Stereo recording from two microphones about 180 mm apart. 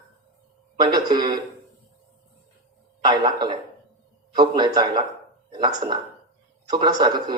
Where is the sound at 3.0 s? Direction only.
25° right (ahead or behind).